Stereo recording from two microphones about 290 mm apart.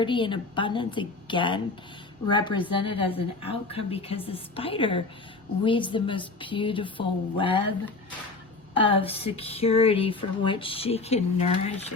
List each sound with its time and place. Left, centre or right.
0.0 s speech: centre
8.8 s speech: centre